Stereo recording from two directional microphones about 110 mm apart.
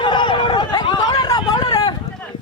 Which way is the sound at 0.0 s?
45° left (ahead or behind).